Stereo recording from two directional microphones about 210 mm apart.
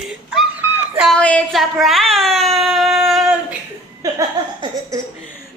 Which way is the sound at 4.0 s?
15° right (ahead or behind).